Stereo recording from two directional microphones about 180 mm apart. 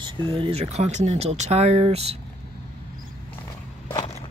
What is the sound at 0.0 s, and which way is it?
Speech, 30° right (ahead or behind).